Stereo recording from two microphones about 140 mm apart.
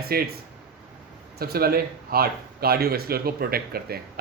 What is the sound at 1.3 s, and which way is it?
Speech, 90° right.